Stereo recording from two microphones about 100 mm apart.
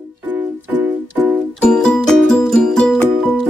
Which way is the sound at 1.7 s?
5° left (ahead or behind).